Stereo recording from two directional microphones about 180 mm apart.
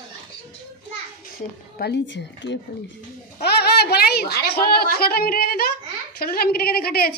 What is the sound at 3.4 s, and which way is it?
A woman's voice, 60° left (ahead or behind).